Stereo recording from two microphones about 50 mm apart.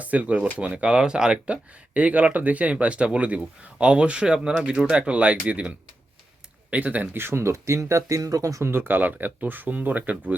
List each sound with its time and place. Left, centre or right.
0.0 s speech: right
1.9 s speech: right
7.2 s speech: right
7.5 s speech: right
8.6 s speech: right